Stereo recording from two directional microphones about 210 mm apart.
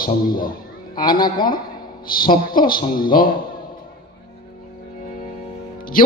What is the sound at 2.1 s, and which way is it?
A woman's voice, 45° left (ahead or behind).